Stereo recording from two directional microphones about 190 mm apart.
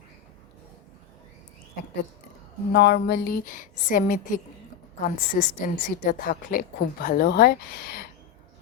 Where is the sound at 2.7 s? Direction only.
60° left (ahead or behind).